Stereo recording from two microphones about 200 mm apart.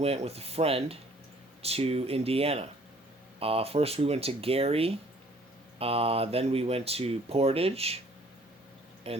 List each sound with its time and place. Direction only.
0.0 s speech: 30° right (ahead or behind)
9.1 s speech: 30° right (ahead or behind)